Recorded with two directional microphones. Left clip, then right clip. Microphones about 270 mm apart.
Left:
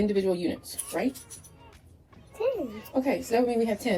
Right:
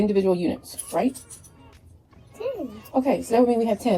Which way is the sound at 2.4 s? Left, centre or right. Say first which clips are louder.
Left 2 dB; centre.